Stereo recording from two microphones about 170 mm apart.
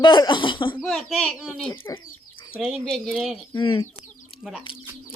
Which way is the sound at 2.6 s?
5° right (ahead or behind).